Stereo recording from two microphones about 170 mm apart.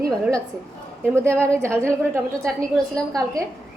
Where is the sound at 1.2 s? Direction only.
5° left (ahead or behind).